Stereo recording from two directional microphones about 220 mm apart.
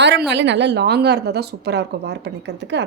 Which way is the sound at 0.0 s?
50° right (ahead or behind).